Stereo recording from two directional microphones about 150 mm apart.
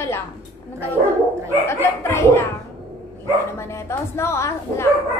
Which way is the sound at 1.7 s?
15° left (ahead or behind).